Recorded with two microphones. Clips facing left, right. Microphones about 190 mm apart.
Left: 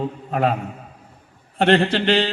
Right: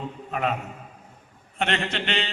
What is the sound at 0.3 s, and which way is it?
Speech, 35° left (ahead or behind).